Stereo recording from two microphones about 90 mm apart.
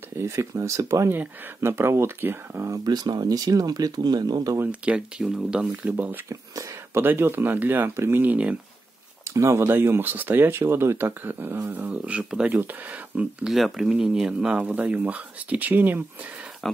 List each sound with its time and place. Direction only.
0.2 s speech: 35° right (ahead or behind)
1.1 s speech: 25° right (ahead or behind)
2.8 s speech: 50° right (ahead or behind)
4.6 s speech: 15° right (ahead or behind)
6.2 s speech: 35° right (ahead or behind)
7.0 s speech: 25° right (ahead or behind)
9.3 s speech: 35° right (ahead or behind); by 13.5 s 15° right (ahead or behind)
13.5 s speech: 5° right (ahead or behind); by 16.0 s 20° right (ahead or behind)
16.6 s speech: 5° left (ahead or behind)